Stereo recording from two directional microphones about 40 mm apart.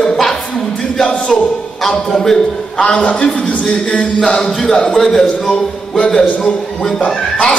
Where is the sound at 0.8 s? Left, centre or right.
Centre.